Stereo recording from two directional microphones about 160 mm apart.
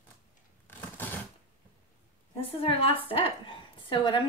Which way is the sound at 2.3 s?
35° left (ahead or behind).